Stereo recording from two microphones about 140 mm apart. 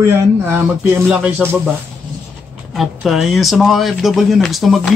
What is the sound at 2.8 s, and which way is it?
Speech, centre (ahead or behind).